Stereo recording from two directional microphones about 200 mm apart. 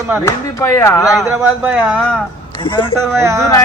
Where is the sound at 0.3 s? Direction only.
15° left (ahead or behind).